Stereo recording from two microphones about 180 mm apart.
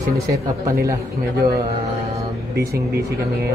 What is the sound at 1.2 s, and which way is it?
Speech, 60° right (ahead or behind).